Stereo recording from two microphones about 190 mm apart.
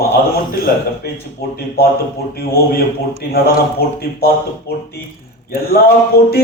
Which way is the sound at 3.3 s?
55° left (ahead or behind).